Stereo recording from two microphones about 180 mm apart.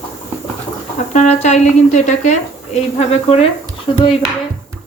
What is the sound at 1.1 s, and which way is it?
Speech, 40° left (ahead or behind).